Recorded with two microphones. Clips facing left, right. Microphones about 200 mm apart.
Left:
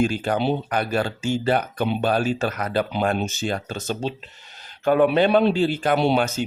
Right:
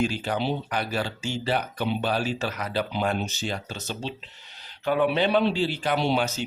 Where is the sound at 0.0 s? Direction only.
50° left (ahead or behind).